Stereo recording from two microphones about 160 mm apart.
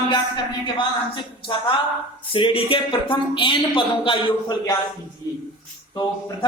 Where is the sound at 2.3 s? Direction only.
35° left (ahead or behind).